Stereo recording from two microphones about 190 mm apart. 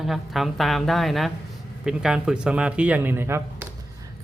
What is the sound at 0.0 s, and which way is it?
Speech, centre (ahead or behind).